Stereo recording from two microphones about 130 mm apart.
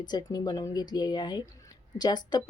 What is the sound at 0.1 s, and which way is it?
A woman's voice, 30° left (ahead or behind).